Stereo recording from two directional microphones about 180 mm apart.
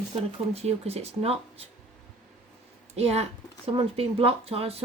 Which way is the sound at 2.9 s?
35° right (ahead or behind).